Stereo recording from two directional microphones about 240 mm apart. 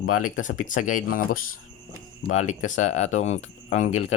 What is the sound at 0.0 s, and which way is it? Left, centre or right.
Speech, left.